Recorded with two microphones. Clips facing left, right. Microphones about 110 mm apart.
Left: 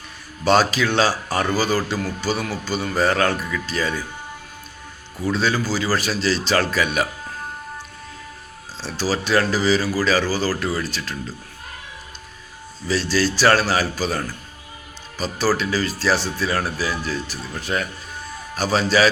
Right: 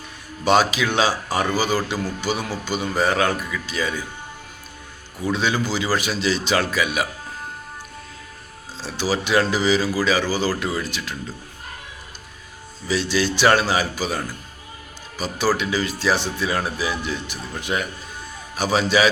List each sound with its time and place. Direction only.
0.4 s speech: 15° right (ahead or behind)
5.2 s speech: 15° right (ahead or behind)
8.8 s speech: 15° right (ahead or behind)
12.9 s speech: 15° right (ahead or behind)